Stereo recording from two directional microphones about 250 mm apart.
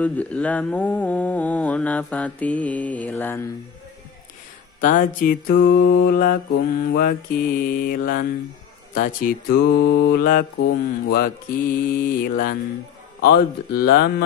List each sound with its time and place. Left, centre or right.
0.0 s mantra: centre
4.7 s mantra: left